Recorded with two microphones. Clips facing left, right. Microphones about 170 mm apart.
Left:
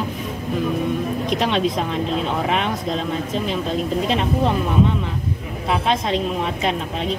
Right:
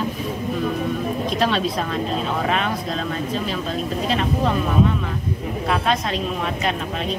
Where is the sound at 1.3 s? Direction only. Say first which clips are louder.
Left 2 dB; 20° left (ahead or behind).